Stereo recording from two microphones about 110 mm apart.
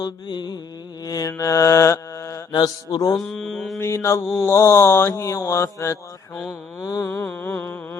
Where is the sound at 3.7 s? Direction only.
25° left (ahead or behind).